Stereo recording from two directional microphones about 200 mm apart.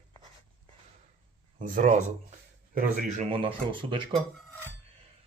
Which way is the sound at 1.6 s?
40° right (ahead or behind).